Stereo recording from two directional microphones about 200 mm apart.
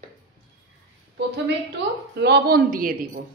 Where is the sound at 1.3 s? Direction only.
60° right (ahead or behind); by 3.2 s 45° right (ahead or behind).